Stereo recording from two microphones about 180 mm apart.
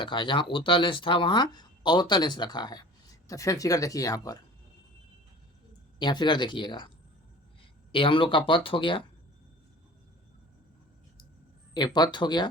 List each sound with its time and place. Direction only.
0.0 s speech: 25° left (ahead or behind)
6.0 s speech: 25° left (ahead or behind)
7.9 s speech: 30° left (ahead or behind)
11.7 s speech: 25° left (ahead or behind)